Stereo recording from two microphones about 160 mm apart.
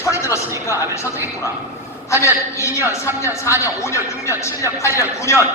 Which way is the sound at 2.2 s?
20° left (ahead or behind).